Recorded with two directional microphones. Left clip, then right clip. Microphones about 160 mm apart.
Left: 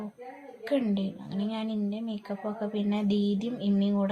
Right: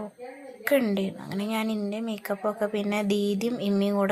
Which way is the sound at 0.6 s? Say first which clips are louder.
Right 5 dB; 20° right (ahead or behind).